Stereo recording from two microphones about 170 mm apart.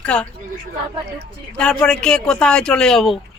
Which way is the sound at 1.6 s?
5° left (ahead or behind).